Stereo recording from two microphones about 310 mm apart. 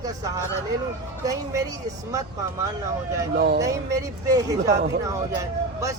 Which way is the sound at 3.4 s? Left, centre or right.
Right.